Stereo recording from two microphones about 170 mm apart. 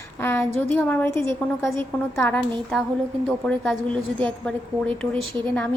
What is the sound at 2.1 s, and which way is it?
A woman's voice, 10° left (ahead or behind).